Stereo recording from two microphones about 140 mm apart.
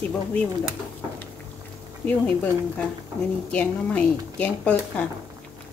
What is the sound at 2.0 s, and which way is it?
Speech, 10° left (ahead or behind).